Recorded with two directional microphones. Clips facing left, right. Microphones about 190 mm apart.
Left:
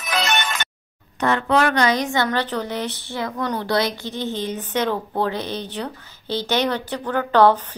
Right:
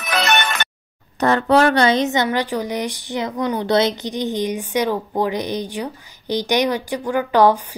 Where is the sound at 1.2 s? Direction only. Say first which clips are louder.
Right 4 dB; 35° right (ahead or behind).